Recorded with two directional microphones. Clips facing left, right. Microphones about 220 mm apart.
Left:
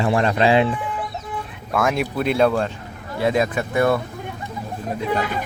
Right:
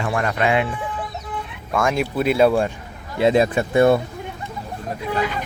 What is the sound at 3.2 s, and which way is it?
Speech, 30° right (ahead or behind).